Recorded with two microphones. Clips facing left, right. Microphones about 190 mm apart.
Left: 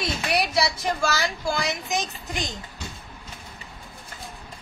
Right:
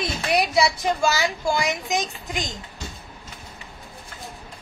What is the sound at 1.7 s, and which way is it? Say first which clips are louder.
Speech: right 2 dB; 15° right (ahead or behind).